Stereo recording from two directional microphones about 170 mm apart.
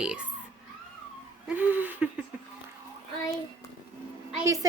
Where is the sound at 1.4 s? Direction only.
10° right (ahead or behind).